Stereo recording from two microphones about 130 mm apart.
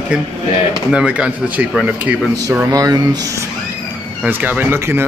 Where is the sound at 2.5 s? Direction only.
25° right (ahead or behind).